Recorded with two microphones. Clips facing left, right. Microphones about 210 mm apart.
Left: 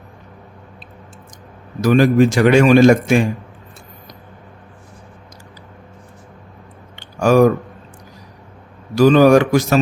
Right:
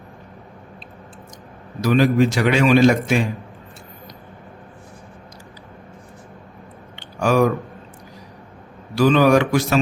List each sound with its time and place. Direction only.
1.8 s a man's voice: 45° left (ahead or behind)
6.9 s a sound: 45° left (ahead or behind)
9.0 s a man's voice: 45° left (ahead or behind)